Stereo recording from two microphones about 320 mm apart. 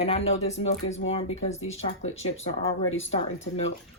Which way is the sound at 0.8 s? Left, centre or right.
Left.